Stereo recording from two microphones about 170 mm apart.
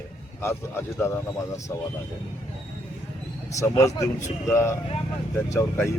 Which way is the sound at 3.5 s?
20° left (ahead or behind).